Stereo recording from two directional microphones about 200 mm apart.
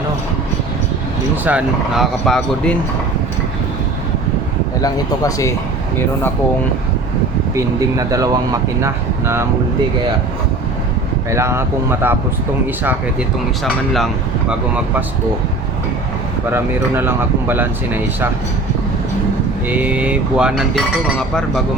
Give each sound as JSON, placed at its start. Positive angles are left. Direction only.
{"t": 1.5, "sound": "speech", "side_deg": -5}
{"t": 4.8, "sound": "speech", "side_deg": 15}
{"t": 7.5, "sound": "speech", "side_deg": -15}
{"t": 11.3, "sound": "speech", "side_deg": -15}
{"t": 16.5, "sound": "speech", "side_deg": -10}
{"t": 19.6, "sound": "speech", "side_deg": -10}